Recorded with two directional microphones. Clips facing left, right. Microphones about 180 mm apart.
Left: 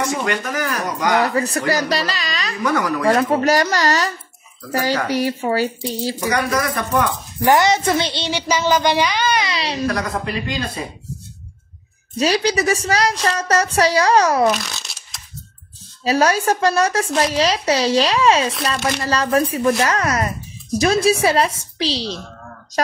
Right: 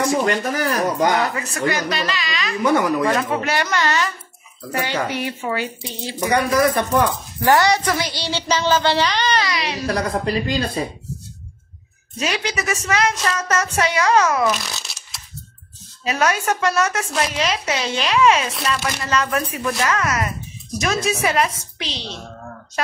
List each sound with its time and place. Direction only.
0.0 s speech: 35° right (ahead or behind)
1.2 s speech: 35° left (ahead or behind)
2.6 s speech: 25° right (ahead or behind)
3.1 s speech: 40° left (ahead or behind)
6.2 s speech: 30° right (ahead or behind)
7.4 s a woman's voice: 20° left (ahead or behind)
8.3 s a woman's voice: 10° left (ahead or behind)
9.5 s a woman's voice: 30° left (ahead or behind)
9.8 s speech: 30° right (ahead or behind)
12.2 s speech: 35° left (ahead or behind)
14.5 s shuffling cards: centre (ahead or behind)
16.0 s speech: 35° left (ahead or behind)